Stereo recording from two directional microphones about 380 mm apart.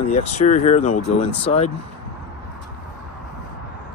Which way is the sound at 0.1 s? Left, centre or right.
Centre.